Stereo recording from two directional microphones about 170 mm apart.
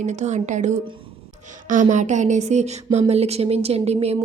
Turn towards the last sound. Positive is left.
turn(degrees=-35)  # may be behind; listen again after turning